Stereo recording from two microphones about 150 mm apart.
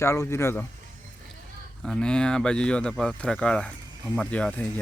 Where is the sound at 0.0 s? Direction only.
15° left (ahead or behind).